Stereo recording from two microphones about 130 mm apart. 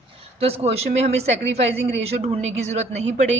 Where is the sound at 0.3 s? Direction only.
50° right (ahead or behind).